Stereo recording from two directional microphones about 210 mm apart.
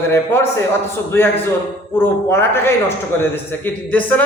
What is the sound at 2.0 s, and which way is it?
Speech, 10° left (ahead or behind).